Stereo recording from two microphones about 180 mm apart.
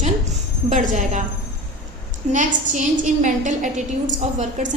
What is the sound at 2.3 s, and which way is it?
A woman's voice, 45° right (ahead or behind).